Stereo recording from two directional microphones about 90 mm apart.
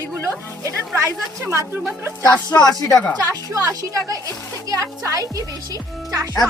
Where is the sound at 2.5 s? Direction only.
50° left (ahead or behind).